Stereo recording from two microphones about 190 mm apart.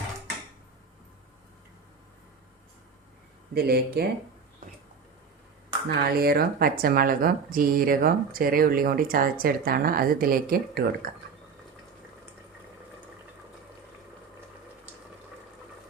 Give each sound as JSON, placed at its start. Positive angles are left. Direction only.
{"t": 3.5, "sound": "speech", "side_deg": -55}
{"t": 5.9, "sound": "speech", "side_deg": -55}